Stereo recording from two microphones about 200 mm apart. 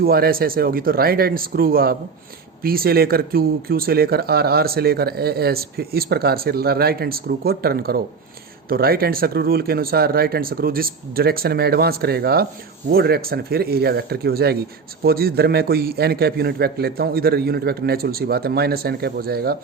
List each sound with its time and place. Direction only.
0.0 s speech: 50° right (ahead or behind)